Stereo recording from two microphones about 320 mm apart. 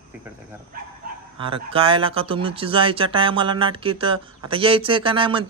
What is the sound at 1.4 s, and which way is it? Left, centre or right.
Speech, centre.